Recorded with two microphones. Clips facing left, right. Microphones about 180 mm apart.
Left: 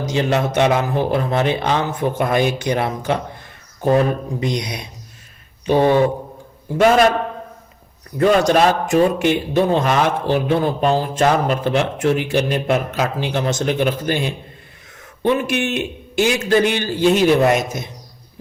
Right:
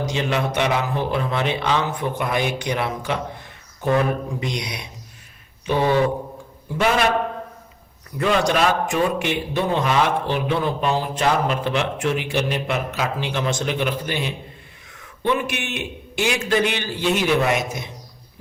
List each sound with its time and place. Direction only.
0.1 s a man's voice: 40° left (ahead or behind)
8.2 s a man's voice: 40° left (ahead or behind)